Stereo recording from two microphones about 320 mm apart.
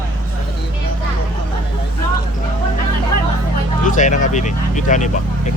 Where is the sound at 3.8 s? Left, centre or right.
Left.